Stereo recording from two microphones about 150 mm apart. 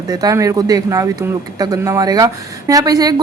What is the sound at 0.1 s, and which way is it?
A woman's voice, 25° right (ahead or behind).